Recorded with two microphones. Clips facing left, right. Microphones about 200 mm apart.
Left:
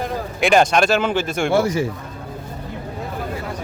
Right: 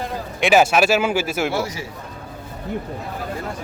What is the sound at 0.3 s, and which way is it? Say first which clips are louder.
A man's voice: even; 5° right (ahead or behind).